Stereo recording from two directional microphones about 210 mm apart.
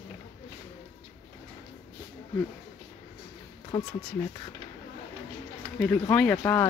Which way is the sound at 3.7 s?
15° left (ahead or behind).